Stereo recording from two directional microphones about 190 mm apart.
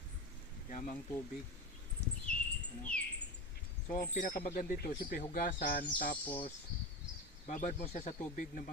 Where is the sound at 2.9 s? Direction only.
5° left (ahead or behind).